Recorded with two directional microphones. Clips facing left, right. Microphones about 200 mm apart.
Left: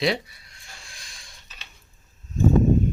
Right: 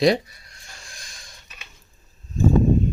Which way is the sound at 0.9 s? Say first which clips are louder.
Right 3 dB; 45° right (ahead or behind).